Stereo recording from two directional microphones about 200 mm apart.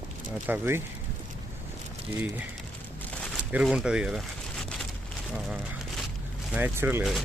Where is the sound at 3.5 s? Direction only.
5° right (ahead or behind).